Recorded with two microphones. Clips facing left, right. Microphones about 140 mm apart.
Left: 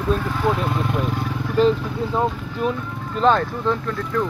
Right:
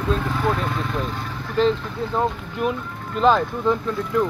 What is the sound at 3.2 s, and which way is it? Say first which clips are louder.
Speech: even; centre (ahead or behind).